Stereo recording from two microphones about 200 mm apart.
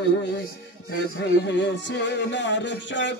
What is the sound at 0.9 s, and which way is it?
Speech, 60° left (ahead or behind).